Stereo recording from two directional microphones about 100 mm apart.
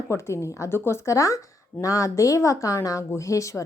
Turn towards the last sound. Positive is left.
turn(degrees=30)  # may be behind; listen again after turning